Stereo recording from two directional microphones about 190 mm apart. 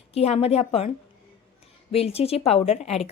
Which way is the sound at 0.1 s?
30° left (ahead or behind).